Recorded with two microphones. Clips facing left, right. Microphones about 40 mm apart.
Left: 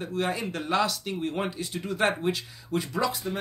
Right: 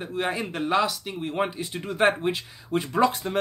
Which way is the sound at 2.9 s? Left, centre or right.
Right.